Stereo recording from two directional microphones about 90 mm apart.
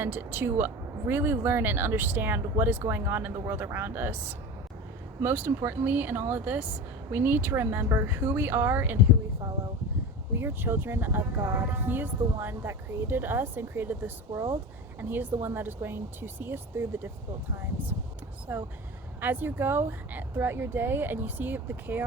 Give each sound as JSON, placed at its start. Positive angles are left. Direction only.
{"t": 0.0, "sound": "speech", "side_deg": -25}
{"t": 10.3, "sound": "speech", "side_deg": -25}
{"t": 15.1, "sound": "speech", "side_deg": -20}
{"t": 18.5, "sound": "speech", "side_deg": -20}